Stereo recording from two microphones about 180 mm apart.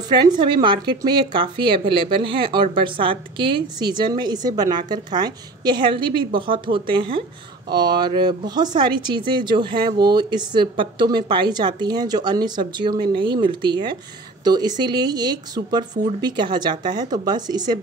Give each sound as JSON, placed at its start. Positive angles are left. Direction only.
{"t": 0.1, "sound": "speech", "side_deg": -25}